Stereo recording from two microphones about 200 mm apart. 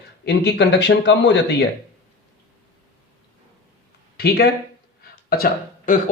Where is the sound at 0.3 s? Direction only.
55° left (ahead or behind).